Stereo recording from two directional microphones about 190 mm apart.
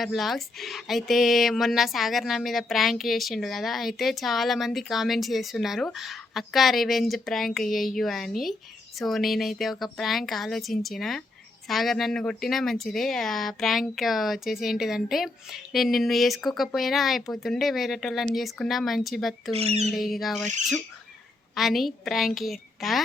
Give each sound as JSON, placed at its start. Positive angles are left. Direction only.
{"t": 0.0, "sound": "speech", "side_deg": 0}
{"t": 19.5, "sound": "speech", "side_deg": -35}
{"t": 19.9, "sound": "speech", "side_deg": 0}
{"t": 21.5, "sound": "speech", "side_deg": 0}